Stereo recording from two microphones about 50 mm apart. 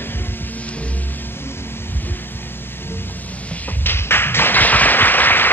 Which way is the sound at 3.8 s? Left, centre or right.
Left.